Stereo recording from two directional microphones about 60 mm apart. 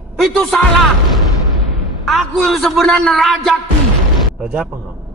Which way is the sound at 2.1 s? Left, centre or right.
Centre.